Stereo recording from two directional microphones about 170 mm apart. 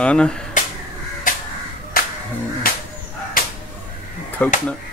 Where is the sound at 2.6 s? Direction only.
60° left (ahead or behind).